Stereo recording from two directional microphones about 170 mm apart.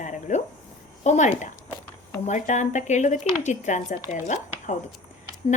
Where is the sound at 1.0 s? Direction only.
45° left (ahead or behind).